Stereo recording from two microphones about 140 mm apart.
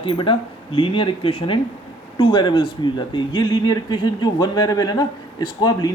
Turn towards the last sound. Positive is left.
turn(degrees=30)  # may be behind; listen again after turning